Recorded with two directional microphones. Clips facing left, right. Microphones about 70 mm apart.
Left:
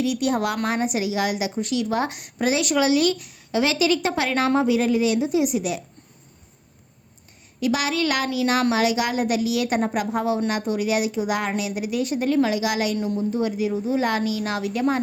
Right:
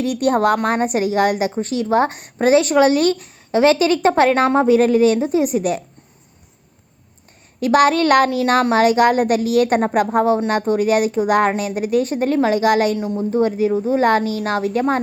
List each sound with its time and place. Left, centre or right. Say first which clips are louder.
0.0 s a woman's voice: right 6 dB; right
7.6 s a woman's voice: right 9 dB; right